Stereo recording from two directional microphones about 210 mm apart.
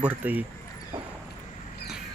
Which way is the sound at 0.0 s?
10° right (ahead or behind).